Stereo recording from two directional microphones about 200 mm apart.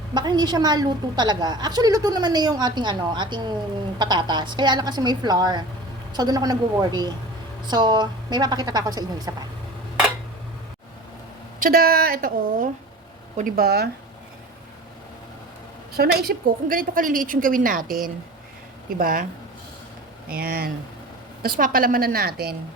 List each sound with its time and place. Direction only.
0.1 s a woman's voice: 20° right (ahead or behind)
11.6 s a woman's voice: 50° right (ahead or behind)
16.0 s a woman's voice: 50° right (ahead or behind)
20.3 s a woman's voice: 50° right (ahead or behind)